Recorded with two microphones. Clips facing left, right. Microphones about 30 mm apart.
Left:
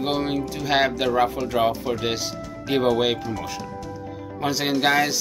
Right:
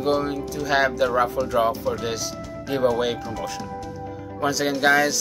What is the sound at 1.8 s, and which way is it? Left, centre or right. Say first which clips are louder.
Speech: left 1 dB; left.